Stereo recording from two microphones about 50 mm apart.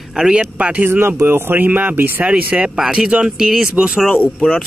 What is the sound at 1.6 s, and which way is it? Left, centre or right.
Speech, right.